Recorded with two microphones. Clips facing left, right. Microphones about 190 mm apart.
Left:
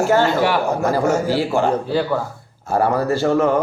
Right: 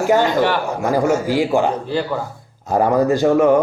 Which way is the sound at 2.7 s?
15° right (ahead or behind).